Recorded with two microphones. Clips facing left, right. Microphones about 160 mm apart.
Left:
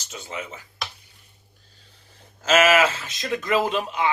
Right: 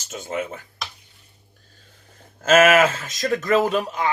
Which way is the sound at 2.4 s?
50° right (ahead or behind).